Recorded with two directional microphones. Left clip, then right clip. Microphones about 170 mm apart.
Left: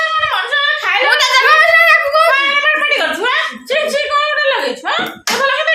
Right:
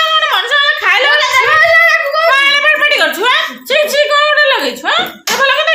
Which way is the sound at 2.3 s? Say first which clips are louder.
Right 3 dB; 45° right (ahead or behind).